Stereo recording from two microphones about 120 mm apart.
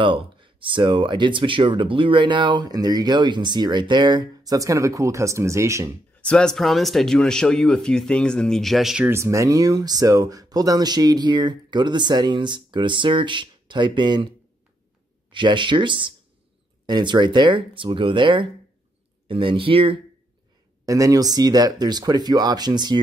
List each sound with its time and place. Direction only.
0.0 s speech: 45° right (ahead or behind); by 5.9 s 25° right (ahead or behind)
6.2 s speech: 5° left (ahead or behind)
9.1 s speech: 25° right (ahead or behind)
15.3 s speech: 40° right (ahead or behind)
20.8 s speech: 30° right (ahead or behind)